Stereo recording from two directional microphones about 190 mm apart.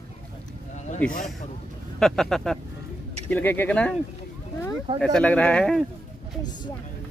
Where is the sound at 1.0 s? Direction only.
10° left (ahead or behind).